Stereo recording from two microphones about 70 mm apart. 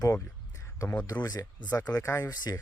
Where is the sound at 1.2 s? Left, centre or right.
Left.